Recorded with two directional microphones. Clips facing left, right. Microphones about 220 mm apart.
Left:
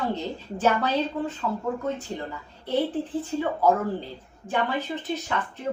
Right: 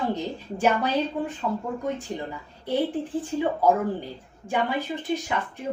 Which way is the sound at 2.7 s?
15° right (ahead or behind).